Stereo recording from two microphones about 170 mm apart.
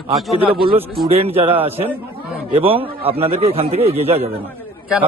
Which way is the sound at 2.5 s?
35° right (ahead or behind).